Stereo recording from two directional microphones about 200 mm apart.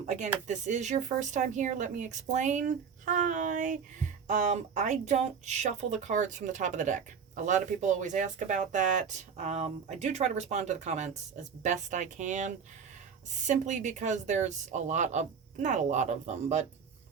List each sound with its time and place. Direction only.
0.0 s speech: 35° right (ahead or behind)